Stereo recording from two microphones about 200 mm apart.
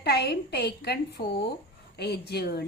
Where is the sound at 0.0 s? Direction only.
55° left (ahead or behind).